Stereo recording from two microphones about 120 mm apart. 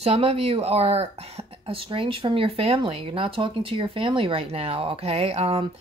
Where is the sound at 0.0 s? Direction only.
55° right (ahead or behind).